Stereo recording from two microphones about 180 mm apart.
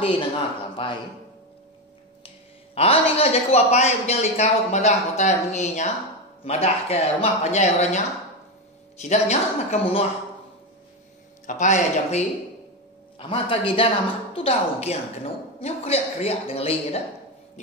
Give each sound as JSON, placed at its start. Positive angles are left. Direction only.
{"t": 0.8, "sound": "speech", "side_deg": 30}
{"t": 2.2, "sound": "a woman's voice", "side_deg": 35}
{"t": 9.0, "sound": "a woman's voice", "side_deg": 40}
{"t": 11.4, "sound": "a woman's voice", "side_deg": 40}